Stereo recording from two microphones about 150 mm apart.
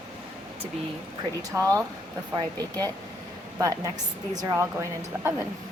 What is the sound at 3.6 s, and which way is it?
A woman's voice, 20° right (ahead or behind).